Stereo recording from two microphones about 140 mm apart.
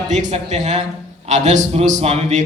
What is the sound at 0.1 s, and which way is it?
A man's voice, 55° right (ahead or behind).